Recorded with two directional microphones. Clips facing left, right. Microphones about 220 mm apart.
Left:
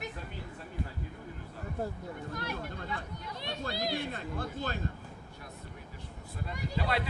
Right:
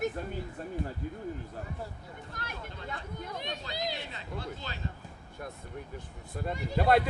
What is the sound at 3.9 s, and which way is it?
Speech, 50° left (ahead or behind).